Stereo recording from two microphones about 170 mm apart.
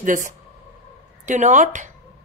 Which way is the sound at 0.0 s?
50° right (ahead or behind).